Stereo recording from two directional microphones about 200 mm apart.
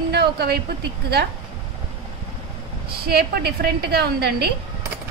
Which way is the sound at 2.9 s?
50° right (ahead or behind).